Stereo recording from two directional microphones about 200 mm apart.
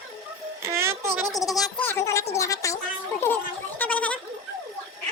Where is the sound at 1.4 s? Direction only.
Centre (ahead or behind).